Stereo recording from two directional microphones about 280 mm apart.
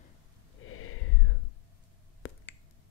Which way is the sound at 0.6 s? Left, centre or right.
Left.